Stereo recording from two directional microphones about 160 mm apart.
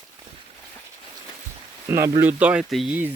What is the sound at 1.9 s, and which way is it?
A man's voice, 15° right (ahead or behind).